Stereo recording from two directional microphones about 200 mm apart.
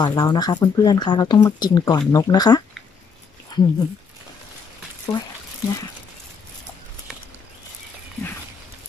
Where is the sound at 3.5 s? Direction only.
20° left (ahead or behind).